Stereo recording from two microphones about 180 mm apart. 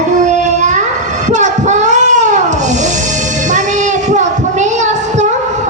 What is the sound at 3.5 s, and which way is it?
Child singing, 40° right (ahead or behind).